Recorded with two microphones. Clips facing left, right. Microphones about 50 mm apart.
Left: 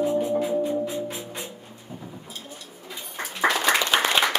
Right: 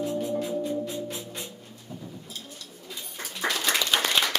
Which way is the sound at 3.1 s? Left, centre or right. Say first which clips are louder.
Left 6 dB; left.